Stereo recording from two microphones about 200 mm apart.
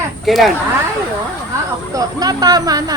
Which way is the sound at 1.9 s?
20° right (ahead or behind).